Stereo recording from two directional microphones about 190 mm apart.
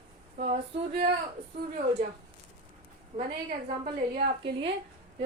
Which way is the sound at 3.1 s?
35° right (ahead or behind).